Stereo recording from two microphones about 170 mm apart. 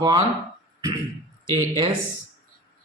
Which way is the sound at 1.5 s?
30° right (ahead or behind).